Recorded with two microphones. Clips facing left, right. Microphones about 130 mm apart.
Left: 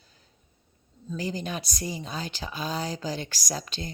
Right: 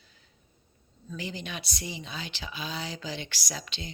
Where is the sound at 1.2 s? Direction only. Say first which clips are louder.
Left 5 dB; 40° left (ahead or behind).